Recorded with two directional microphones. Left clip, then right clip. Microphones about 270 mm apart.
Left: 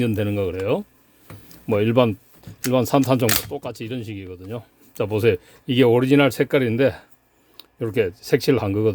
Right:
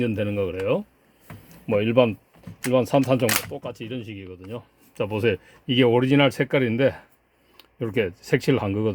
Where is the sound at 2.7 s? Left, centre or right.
Left.